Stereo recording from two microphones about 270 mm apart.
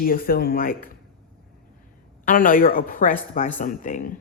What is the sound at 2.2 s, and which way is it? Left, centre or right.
A woman's voice, left.